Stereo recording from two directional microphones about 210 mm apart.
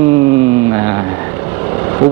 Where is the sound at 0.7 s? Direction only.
20° right (ahead or behind).